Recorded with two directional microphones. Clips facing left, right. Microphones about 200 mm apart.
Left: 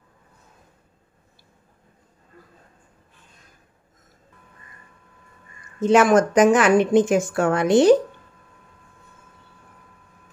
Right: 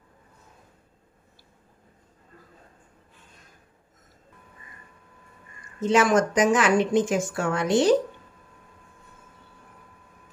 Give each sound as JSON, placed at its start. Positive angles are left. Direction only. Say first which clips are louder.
{"t": 5.8, "sound": "speech", "louder": "left 5 dB", "side_deg": 55}